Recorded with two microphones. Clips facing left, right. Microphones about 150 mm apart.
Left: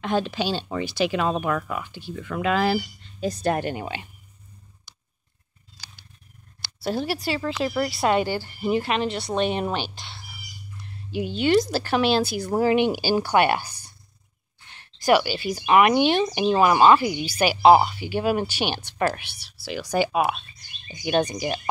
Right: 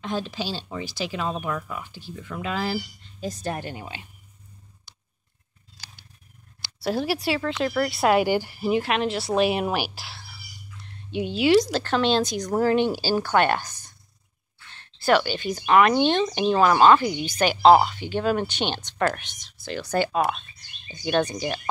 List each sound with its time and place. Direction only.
0.0 s speech: 65° left (ahead or behind)
6.6 s speech: centre (ahead or behind)